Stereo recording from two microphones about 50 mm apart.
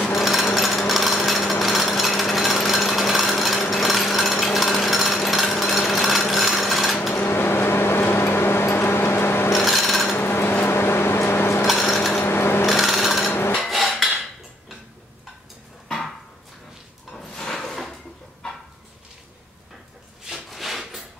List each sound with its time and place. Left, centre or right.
0.0 s jackhammer: centre
7.2 s vehicle: left
9.7 s filing: centre
10.1 s a sound: left
12.2 s wood: left
12.6 s rub: centre
13.7 s cutlery: centre
17.2 s a sound: centre
20.2 s rub: centre